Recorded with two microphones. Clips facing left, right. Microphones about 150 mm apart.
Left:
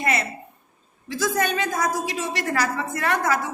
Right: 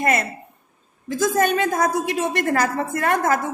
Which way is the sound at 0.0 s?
50° right (ahead or behind).